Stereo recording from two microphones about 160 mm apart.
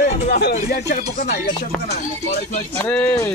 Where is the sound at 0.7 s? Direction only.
90° left.